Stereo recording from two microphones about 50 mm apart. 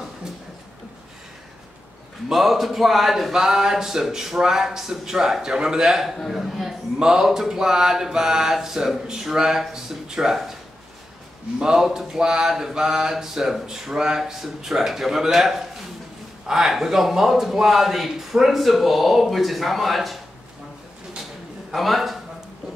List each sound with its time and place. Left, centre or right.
2.2 s mantra: centre
6.1 s speech: centre
7.0 s mantra: centre
11.6 s mantra: centre
16.4 s speech: centre
21.7 s speech: centre